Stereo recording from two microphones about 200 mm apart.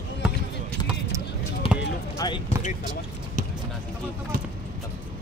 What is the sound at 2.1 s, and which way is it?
Basketball bounce, 20° left (ahead or behind).